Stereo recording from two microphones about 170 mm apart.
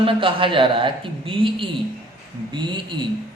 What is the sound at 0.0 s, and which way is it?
A man's voice, 30° right (ahead or behind).